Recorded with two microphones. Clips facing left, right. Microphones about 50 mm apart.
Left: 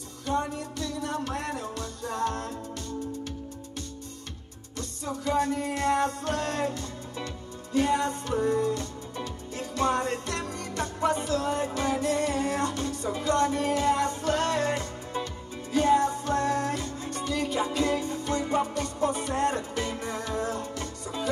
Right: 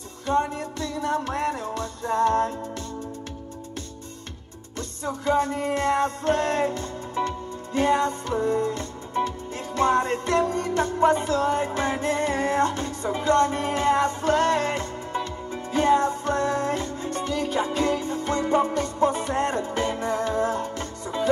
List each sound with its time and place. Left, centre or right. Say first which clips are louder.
0.3 s music: right 5 dB; right
4.7 s music: right 3 dB; right